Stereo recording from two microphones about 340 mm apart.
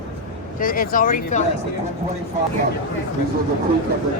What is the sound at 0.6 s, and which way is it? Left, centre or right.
Speech, left.